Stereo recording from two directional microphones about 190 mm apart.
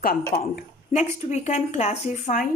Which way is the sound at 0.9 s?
35° left (ahead or behind).